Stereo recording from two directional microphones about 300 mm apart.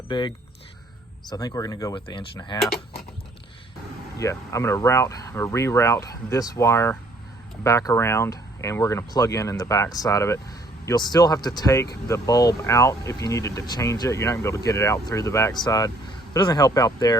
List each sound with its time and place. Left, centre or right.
0.1 s speech: centre
4.2 s speech: centre